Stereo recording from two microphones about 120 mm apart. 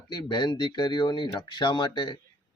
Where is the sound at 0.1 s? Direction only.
40° left (ahead or behind).